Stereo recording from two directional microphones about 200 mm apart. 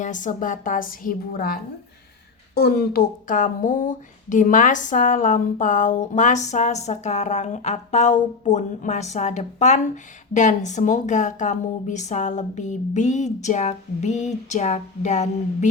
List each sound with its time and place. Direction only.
0.0 s speech: 40° left (ahead or behind)
2.6 s speech: 50° left (ahead or behind); by 15.7 s 35° left (ahead or behind)